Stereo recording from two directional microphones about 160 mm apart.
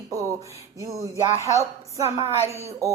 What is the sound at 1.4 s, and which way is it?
A woman's voice, 20° right (ahead or behind).